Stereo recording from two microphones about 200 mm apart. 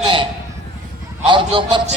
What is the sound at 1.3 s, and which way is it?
Speech, 25° right (ahead or behind).